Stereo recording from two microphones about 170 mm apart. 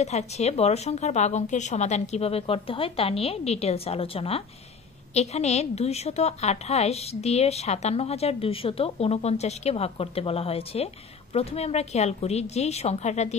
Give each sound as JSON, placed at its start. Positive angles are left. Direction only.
{"t": 0.0, "sound": "a woman's voice", "side_deg": 40}